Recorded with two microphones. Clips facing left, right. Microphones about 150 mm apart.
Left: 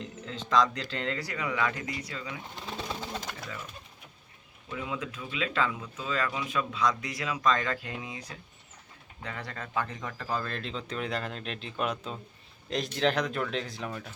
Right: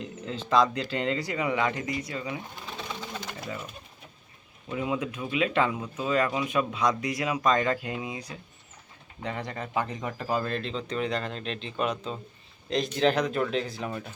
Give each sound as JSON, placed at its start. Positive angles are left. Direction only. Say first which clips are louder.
{"t": 0.0, "sound": "speech", "louder": "right 4 dB", "side_deg": -10}
{"t": 4.7, "sound": "speech", "louder": "right 6 dB", "side_deg": -20}
{"t": 10.6, "sound": "speech", "louder": "right 4 dB", "side_deg": 0}